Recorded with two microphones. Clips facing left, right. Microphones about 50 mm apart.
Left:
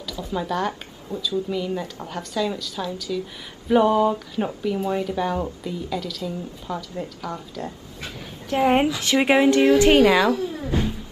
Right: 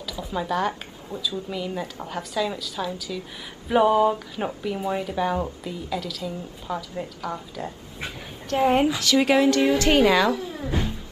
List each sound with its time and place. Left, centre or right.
0.0 s speech: centre
8.5 s a woman's voice: centre
9.0 s speech: left
9.8 s speech: centre